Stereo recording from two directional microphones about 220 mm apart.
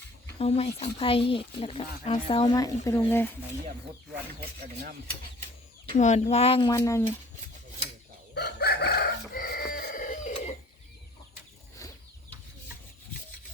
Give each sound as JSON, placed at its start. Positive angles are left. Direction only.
{"t": 0.3, "sound": "speech", "side_deg": 25}
{"t": 4.6, "sound": "speech", "side_deg": -40}
{"t": 5.9, "sound": "speech", "side_deg": 35}
{"t": 8.4, "sound": "chicken", "side_deg": 50}
{"t": 11.8, "sound": "chicken", "side_deg": 15}